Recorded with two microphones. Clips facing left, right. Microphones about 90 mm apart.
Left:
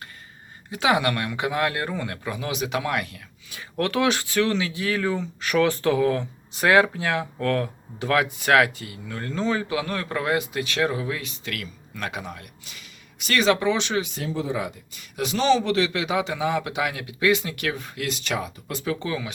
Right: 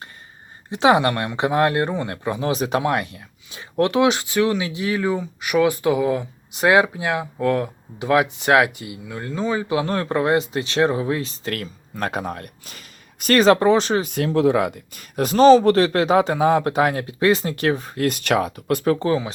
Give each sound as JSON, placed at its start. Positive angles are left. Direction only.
{"t": 0.7, "sound": "speech", "side_deg": -30}
{"t": 9.7, "sound": "speech", "side_deg": -30}
{"t": 14.1, "sound": "speech", "side_deg": -65}
{"t": 15.1, "sound": "speech", "side_deg": -45}
{"t": 18.1, "sound": "speech", "side_deg": -60}
{"t": 18.9, "sound": "speech", "side_deg": -35}